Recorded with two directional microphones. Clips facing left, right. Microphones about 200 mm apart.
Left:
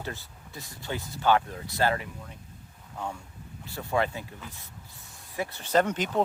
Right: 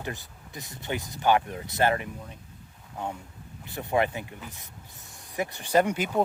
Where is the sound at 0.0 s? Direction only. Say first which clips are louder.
Right 2 dB; 15° right (ahead or behind).